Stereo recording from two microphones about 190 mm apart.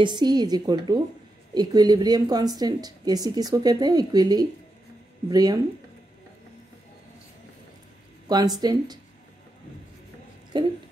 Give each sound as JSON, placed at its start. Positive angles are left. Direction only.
{"t": 0.0, "sound": "a woman's voice", "side_deg": -25}
{"t": 8.3, "sound": "a woman's voice", "side_deg": -20}
{"t": 10.5, "sound": "a woman's voice", "side_deg": -25}